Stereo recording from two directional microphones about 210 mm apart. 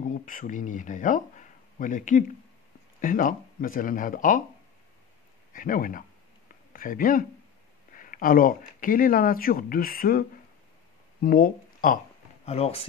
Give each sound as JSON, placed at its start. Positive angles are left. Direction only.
{"t": 0.0, "sound": "speech", "side_deg": 40}
{"t": 5.5, "sound": "speech", "side_deg": 40}
{"t": 11.2, "sound": "speech", "side_deg": 45}
{"t": 12.4, "sound": "speech", "side_deg": 30}